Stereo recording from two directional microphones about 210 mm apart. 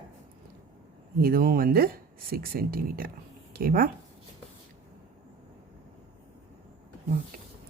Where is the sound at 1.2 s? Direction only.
45° right (ahead or behind).